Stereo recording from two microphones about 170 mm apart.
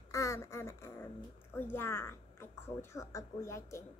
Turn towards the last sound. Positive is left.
turn(degrees=15)  # may be behind; listen again after turning